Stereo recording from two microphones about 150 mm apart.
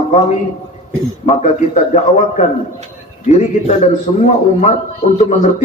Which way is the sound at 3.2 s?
50° left (ahead or behind).